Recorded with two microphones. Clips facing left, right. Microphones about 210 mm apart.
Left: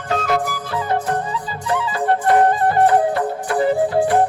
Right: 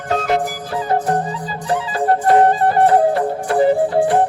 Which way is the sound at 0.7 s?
35° right (ahead or behind).